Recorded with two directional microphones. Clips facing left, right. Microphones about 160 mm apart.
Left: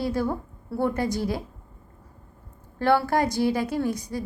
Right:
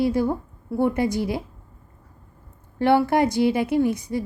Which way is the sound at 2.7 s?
20° right (ahead or behind).